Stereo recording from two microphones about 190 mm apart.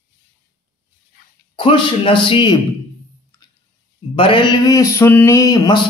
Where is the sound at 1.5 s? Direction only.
25° left (ahead or behind).